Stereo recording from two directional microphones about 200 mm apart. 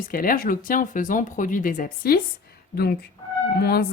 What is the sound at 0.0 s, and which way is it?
A woman's voice, 45° left (ahead or behind).